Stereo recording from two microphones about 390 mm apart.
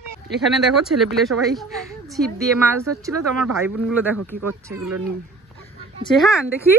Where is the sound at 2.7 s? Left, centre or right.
Right.